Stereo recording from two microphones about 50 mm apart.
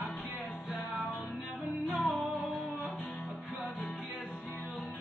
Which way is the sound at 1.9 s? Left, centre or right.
Centre.